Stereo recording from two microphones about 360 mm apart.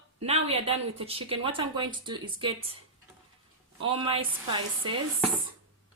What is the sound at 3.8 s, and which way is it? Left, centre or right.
Speech, centre.